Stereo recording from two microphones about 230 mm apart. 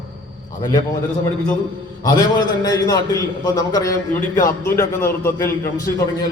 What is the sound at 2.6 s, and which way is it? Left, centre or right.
Mantra, centre.